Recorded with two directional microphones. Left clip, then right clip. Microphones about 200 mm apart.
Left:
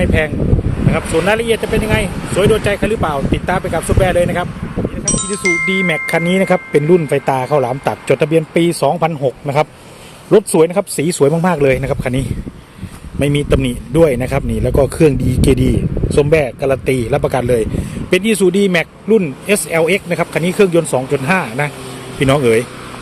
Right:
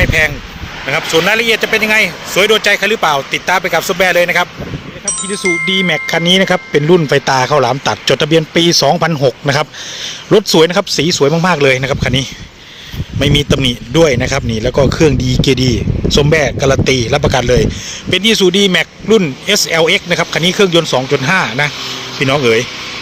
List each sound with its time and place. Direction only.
0.0 s a man's voice: centre (ahead or behind); by 10.6 s 15° right (ahead or behind)
10.6 s a man's voice: 5° right (ahead or behind)